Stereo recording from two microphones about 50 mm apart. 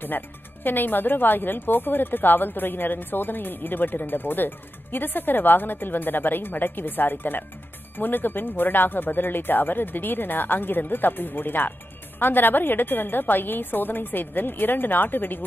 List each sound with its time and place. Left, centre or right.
0.7 s a woman's voice: left